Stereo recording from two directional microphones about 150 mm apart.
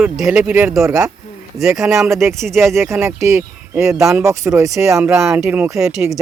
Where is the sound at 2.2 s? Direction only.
15° right (ahead or behind).